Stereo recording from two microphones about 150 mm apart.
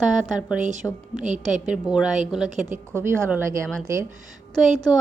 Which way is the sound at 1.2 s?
55° right (ahead or behind).